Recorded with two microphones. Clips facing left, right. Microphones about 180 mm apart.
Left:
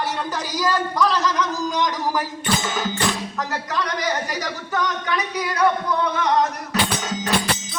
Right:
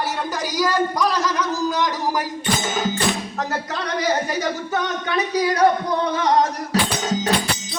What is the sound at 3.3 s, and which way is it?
A man's voice, 30° right (ahead or behind).